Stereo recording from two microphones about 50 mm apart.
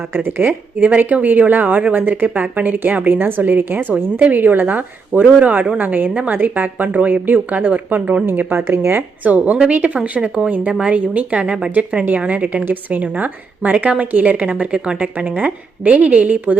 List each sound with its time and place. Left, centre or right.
0.1 s a woman's voice: right
8.3 s speech: right
9.2 s a woman's voice: right